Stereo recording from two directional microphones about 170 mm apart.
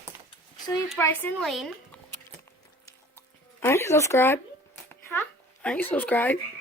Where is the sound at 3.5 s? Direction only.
15° left (ahead or behind).